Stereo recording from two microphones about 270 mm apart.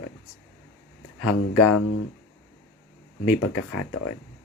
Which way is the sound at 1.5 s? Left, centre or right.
Left.